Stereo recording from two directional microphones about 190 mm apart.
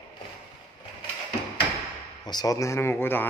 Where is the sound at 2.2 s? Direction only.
20° left (ahead or behind).